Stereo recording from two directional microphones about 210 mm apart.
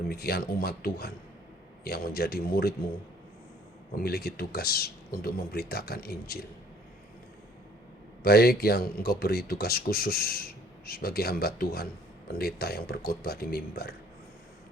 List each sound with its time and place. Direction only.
0.1 s speech: 50° left (ahead or behind)
3.9 s speech: 45° left (ahead or behind)
8.2 s speech: 45° left (ahead or behind)